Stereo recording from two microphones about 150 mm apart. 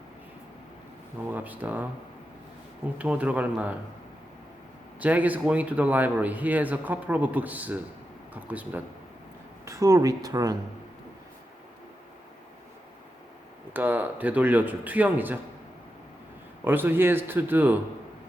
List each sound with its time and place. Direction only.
1.3 s speech: 10° right (ahead or behind)
3.0 s speech: 10° right (ahead or behind)
4.9 s speech: 10° right (ahead or behind)
13.7 s speech: 10° right (ahead or behind)
16.6 s speech: 15° right (ahead or behind)